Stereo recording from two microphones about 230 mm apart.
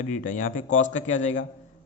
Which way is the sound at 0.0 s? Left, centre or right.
Left.